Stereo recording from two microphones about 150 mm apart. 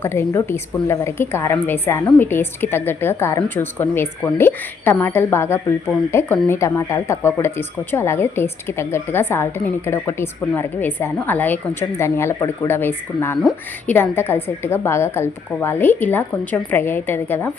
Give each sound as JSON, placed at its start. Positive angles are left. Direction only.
{"t": 0.0, "sound": "speech", "side_deg": 15}